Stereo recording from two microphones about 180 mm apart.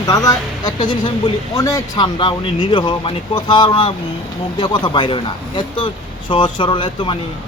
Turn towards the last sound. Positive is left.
turn(degrees=30)  # may be behind; listen again after turning